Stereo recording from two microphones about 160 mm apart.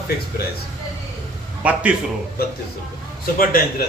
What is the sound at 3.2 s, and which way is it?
Speech, 60° left (ahead or behind).